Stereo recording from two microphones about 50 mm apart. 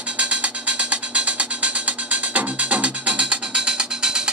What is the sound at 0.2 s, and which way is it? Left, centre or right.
Music, right.